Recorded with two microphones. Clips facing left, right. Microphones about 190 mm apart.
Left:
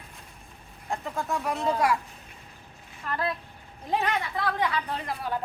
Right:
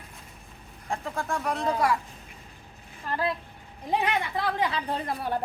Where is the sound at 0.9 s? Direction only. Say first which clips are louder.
Even; centre (ahead or behind).